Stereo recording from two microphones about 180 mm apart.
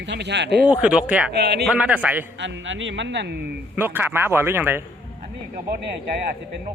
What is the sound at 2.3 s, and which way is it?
Speech, 90° right.